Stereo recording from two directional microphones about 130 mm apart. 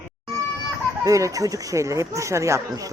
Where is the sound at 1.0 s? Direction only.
25° right (ahead or behind).